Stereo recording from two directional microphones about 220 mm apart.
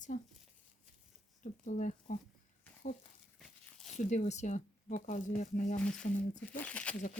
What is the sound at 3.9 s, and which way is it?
Speech, 30° left (ahead or behind).